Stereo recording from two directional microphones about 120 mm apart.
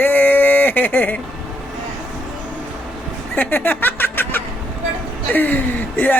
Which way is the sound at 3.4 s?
15° left (ahead or behind).